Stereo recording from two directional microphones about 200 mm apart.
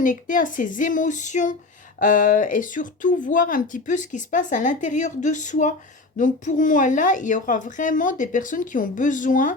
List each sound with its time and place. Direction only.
0.0 s speech: 40° left (ahead or behind)